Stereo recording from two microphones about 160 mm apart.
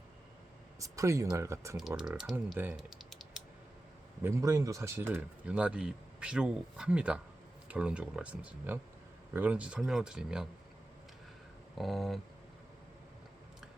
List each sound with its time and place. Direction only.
0.8 s speech: 20° right (ahead or behind)
2.0 s speech: centre (ahead or behind)
2.7 s typing: centre (ahead or behind)
4.2 s speech: 15° right (ahead or behind)
11.8 s speech: centre (ahead or behind)